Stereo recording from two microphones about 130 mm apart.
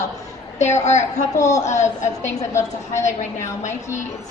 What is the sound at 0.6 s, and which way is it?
A woman's voice, 60° left (ahead or behind).